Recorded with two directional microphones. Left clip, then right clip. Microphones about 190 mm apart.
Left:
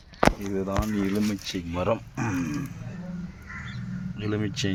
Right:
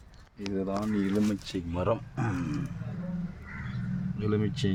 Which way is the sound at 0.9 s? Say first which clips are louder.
Left 2 dB; 15° left (ahead or behind).